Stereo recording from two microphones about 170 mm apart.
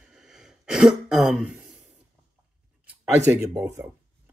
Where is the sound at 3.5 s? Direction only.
15° right (ahead or behind).